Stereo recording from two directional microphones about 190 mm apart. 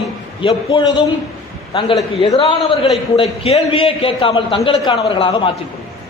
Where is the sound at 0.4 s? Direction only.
25° left (ahead or behind).